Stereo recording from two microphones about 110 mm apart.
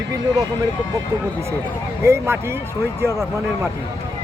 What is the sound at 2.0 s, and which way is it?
Speech, 25° right (ahead or behind).